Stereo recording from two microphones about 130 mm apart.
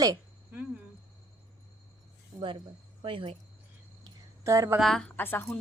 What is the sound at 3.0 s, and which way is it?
Speech, 45° right (ahead or behind).